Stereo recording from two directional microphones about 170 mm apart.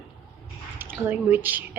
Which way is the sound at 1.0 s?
10° right (ahead or behind).